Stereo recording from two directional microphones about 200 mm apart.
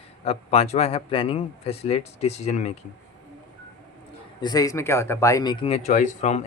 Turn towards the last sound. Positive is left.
turn(degrees=35)  # may be behind; listen again after turning